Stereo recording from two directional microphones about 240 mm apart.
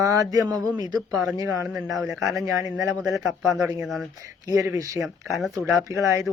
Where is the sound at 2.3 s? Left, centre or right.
Centre.